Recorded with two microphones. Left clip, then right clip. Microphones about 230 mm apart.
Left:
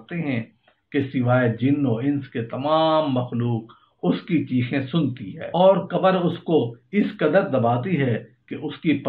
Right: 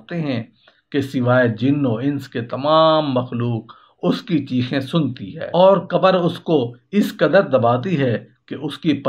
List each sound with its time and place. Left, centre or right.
0.1 s speech: right